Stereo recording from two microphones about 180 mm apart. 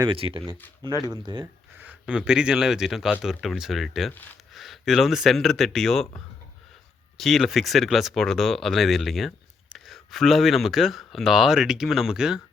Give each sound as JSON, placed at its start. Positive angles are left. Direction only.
{"t": 0.0, "sound": "speech", "side_deg": -30}
{"t": 1.8, "sound": "speech", "side_deg": -5}
{"t": 7.2, "sound": "speech", "side_deg": 0}